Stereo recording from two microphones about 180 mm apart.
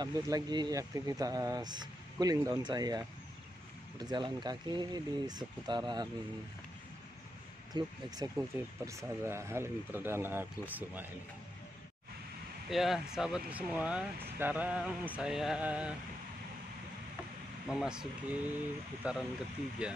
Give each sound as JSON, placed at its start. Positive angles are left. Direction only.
{"t": 0.0, "sound": "speech", "side_deg": -25}
{"t": 7.7, "sound": "speech", "side_deg": -20}
{"t": 12.6, "sound": "speech", "side_deg": 0}
{"t": 17.6, "sound": "speech", "side_deg": -5}